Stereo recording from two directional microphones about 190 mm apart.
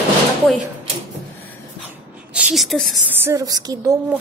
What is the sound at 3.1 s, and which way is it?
Speech, 15° right (ahead or behind).